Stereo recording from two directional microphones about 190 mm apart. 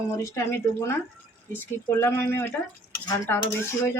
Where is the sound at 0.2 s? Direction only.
15° left (ahead or behind).